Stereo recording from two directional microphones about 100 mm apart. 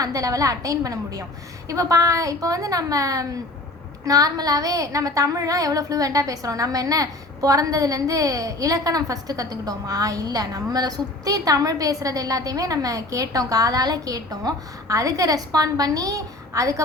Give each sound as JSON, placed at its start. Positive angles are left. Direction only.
{"t": 0.0, "sound": "a woman's voice", "side_deg": -35}